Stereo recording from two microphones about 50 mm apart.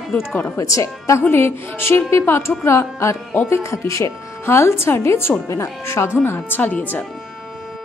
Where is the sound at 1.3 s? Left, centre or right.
Left.